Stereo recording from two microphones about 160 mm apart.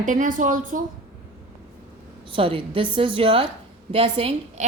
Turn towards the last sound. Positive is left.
turn(degrees=-35)  # may be behind; listen again after turning